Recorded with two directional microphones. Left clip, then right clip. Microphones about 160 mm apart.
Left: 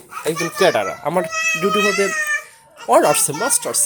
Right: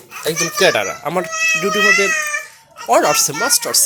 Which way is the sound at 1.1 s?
20° left (ahead or behind).